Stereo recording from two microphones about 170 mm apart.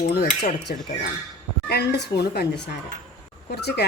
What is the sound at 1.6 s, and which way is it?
Speech, 75° left (ahead or behind).